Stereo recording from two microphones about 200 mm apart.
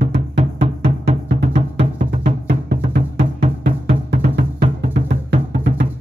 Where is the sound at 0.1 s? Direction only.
30° right (ahead or behind).